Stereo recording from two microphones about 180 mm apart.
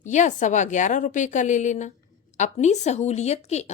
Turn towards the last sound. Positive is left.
turn(degrees=35)  # may be behind; listen again after turning